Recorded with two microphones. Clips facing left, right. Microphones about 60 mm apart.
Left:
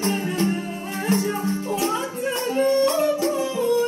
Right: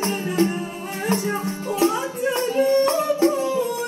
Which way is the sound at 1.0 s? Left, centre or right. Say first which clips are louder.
Left 1 dB; right.